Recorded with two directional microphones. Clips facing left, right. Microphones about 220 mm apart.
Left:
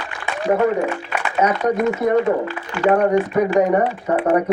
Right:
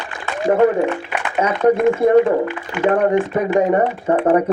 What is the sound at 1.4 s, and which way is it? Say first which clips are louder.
Speech: right 3 dB; 25° right (ahead or behind).